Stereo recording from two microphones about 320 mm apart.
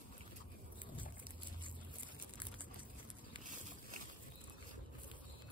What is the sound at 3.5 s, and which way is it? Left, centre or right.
Boat, right.